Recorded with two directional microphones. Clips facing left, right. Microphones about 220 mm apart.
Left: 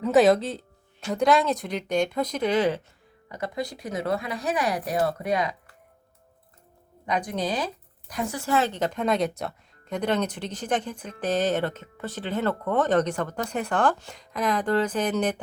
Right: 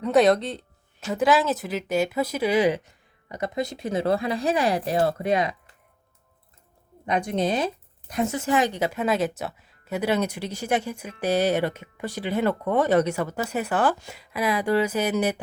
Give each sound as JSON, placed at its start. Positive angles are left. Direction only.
{"t": 0.0, "sound": "speech", "side_deg": 0}
{"t": 7.0, "sound": "speech", "side_deg": -25}